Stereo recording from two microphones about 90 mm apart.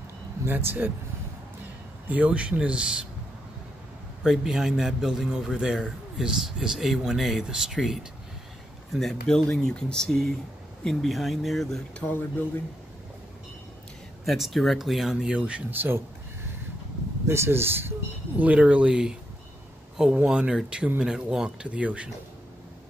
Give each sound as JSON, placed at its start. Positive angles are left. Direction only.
{"t": 0.5, "sound": "speech", "side_deg": -25}
{"t": 2.0, "sound": "speech", "side_deg": -15}
{"t": 4.2, "sound": "a man's voice", "side_deg": -5}
{"t": 12.0, "sound": "speech", "side_deg": 20}
{"t": 14.2, "sound": "a man's voice", "side_deg": 0}
{"t": 17.3, "sound": "speech", "side_deg": -30}
{"t": 18.4, "sound": "speech", "side_deg": -15}